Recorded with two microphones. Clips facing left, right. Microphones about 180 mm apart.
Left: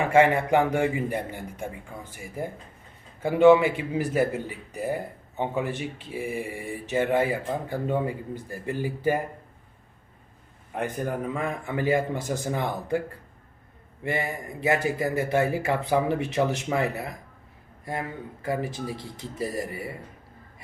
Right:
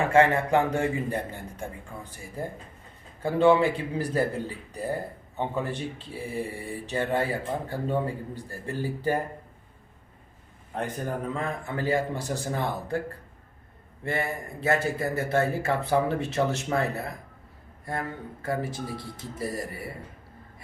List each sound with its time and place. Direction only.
0.0 s a man's voice: 15° left (ahead or behind)
10.8 s a man's voice: 15° left (ahead or behind)
14.0 s a man's voice: 15° left (ahead or behind)
18.4 s a man's voice: 15° left (ahead or behind)